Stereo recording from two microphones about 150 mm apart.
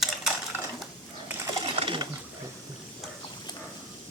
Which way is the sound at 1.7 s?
35° right (ahead or behind).